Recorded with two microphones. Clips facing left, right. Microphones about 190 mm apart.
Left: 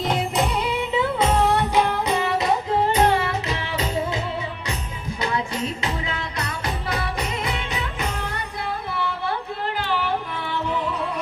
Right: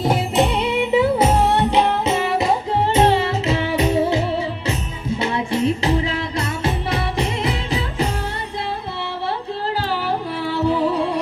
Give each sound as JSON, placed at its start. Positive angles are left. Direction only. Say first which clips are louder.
{"t": 0.3, "sound": "music", "louder": "right 5 dB", "side_deg": -25}
{"t": 9.8, "sound": "music", "louder": "right 2 dB", "side_deg": -40}